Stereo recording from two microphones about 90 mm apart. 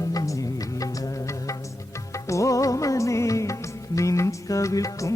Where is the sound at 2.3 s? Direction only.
35° left (ahead or behind).